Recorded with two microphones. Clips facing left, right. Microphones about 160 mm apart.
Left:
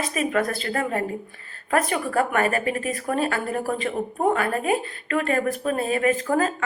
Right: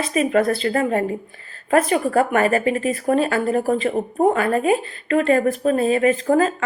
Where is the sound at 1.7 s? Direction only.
35° right (ahead or behind).